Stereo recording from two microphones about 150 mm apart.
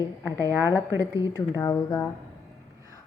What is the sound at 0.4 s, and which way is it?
A woman's voice, 20° left (ahead or behind).